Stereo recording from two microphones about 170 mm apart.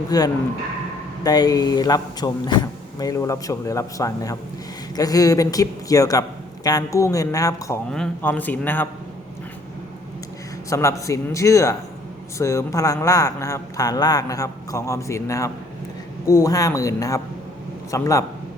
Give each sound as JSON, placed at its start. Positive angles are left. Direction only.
{"t": 0.1, "sound": "a man's voice", "side_deg": 20}
{"t": 7.9, "sound": "a man's voice", "side_deg": 5}
{"t": 10.7, "sound": "a man's voice", "side_deg": 20}